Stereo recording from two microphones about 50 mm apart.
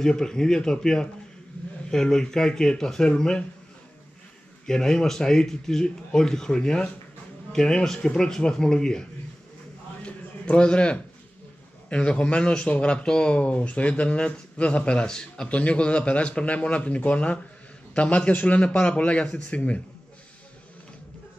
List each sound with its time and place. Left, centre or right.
0.0 s speech: centre
4.6 s speech: centre
10.0 s a sound: left
11.9 s speech: left